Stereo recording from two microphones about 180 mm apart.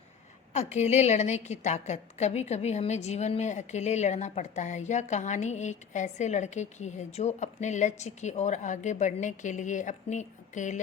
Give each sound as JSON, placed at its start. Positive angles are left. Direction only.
{"t": 0.5, "sound": "a woman's voice", "side_deg": 40}